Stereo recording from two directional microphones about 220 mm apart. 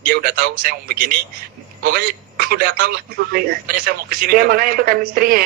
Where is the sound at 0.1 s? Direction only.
40° right (ahead or behind).